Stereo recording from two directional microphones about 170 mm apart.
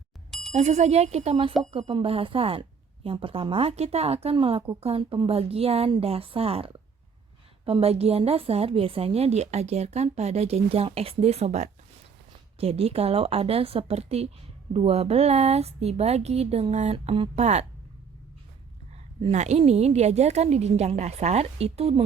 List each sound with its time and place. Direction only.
0.3 s bicycle bell: centre (ahead or behind)
0.5 s a woman's voice: 40° right (ahead or behind)
19.2 s a woman's voice: 40° right (ahead or behind)